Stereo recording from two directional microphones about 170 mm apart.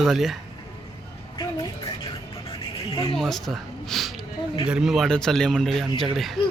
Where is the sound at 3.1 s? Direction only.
Centre (ahead or behind).